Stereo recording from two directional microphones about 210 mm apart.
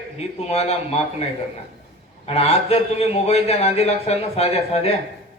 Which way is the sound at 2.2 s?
30° left (ahead or behind).